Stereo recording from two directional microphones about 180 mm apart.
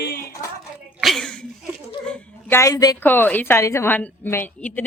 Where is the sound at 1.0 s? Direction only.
Centre (ahead or behind).